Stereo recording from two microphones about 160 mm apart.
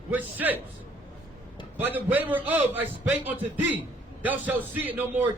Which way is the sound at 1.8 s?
10° right (ahead or behind).